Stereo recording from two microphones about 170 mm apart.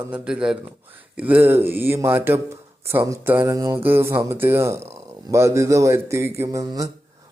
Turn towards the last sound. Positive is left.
turn(degrees=-20)  # may be behind; listen again after turning